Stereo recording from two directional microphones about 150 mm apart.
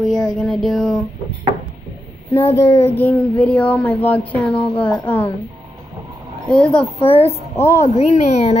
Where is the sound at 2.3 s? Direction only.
45° left (ahead or behind).